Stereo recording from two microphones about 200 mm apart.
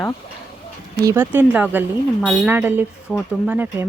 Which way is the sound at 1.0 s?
10° right (ahead or behind).